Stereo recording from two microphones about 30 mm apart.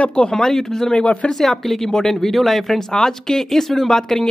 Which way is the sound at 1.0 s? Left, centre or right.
Left.